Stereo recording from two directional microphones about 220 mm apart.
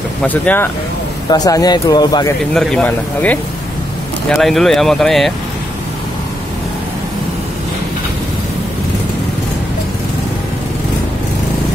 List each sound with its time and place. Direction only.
0.2 s speech: 5° left (ahead or behind)
2.5 s speech: 5° left (ahead or behind)